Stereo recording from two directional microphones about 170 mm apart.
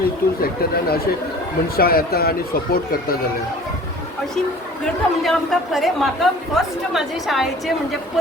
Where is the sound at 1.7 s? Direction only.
65° left (ahead or behind).